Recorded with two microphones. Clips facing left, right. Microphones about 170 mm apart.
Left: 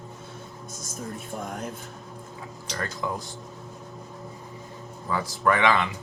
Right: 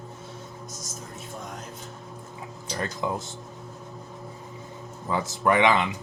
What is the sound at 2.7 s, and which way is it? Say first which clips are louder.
Speech: right 2 dB; 20° right (ahead or behind).